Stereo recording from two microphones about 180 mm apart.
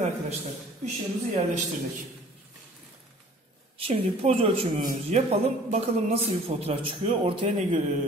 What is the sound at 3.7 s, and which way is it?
Speech, 30° right (ahead or behind).